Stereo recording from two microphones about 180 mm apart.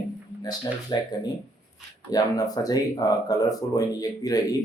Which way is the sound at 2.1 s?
20° left (ahead or behind).